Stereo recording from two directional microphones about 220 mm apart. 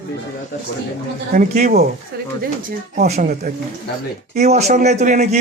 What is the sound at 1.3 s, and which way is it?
Speech, 40° right (ahead or behind).